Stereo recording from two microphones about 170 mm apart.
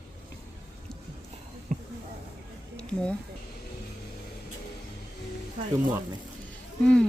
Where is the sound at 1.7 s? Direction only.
45° right (ahead or behind).